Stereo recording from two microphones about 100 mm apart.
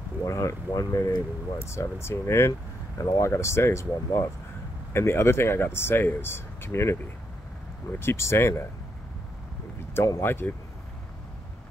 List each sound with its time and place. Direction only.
0.2 s speech: 30° left (ahead or behind)
8.0 s speech: 25° left (ahead or behind)
9.9 s speech: 35° left (ahead or behind)
10.2 s speech: 20° left (ahead or behind)